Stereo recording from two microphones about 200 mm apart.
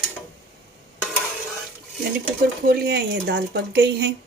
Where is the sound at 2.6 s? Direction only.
50° right (ahead or behind).